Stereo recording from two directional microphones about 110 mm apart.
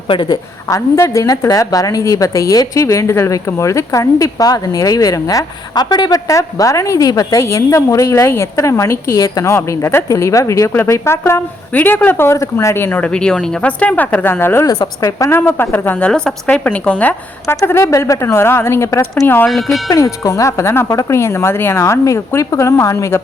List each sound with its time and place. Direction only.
0.1 s a woman's voice: 45° left (ahead or behind)
0.7 s a woman's voice: 30° left (ahead or behind)
14.7 s a woman's voice: 30° left (ahead or behind); by 17.2 s 15° left (ahead or behind)
17.4 s a woman's voice: 25° left (ahead or behind)
19.5 s speech: centre (ahead or behind)
19.9 s a woman's voice: 30° left (ahead or behind)